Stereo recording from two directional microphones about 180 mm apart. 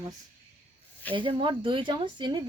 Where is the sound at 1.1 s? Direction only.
25° right (ahead or behind).